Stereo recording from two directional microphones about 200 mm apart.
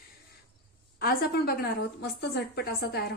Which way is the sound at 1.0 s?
50° left (ahead or behind).